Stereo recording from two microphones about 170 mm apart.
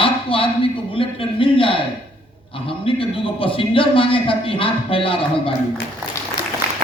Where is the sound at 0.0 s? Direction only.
30° left (ahead or behind).